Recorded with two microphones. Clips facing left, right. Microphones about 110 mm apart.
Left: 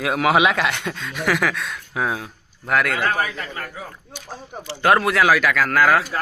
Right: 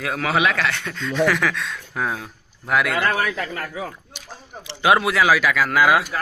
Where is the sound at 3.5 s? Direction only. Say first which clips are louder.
Right 3 dB; 90° right.